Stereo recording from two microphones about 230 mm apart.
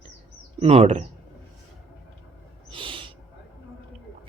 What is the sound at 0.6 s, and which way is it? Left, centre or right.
Speech, right.